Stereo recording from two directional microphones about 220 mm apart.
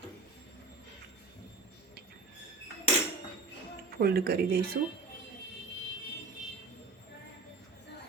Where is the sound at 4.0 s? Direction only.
45° right (ahead or behind).